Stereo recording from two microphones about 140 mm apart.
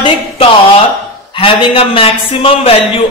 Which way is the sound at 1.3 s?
40° left (ahead or behind).